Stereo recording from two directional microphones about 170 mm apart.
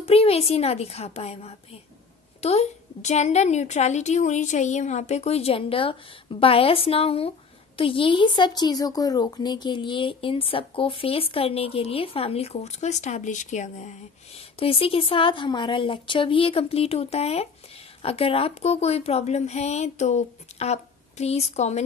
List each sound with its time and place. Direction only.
0.0 s a woman's voice: 35° left (ahead or behind)